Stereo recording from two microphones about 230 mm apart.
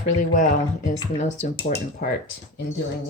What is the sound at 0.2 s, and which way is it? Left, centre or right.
Speech, left.